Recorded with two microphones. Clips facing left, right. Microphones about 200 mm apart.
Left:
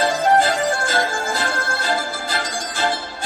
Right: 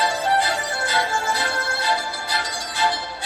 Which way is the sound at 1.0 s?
45° left (ahead or behind).